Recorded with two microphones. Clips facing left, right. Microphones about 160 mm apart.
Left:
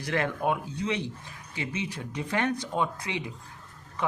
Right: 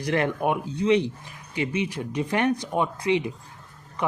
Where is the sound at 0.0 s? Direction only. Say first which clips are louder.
Right 4 dB; 15° right (ahead or behind).